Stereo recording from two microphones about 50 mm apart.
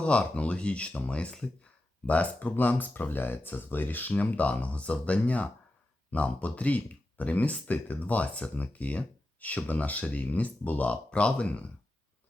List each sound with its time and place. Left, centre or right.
0.0 s speech: left
2.0 s speech: left